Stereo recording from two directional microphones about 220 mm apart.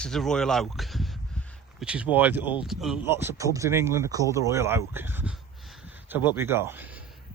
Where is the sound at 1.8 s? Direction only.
5° right (ahead or behind).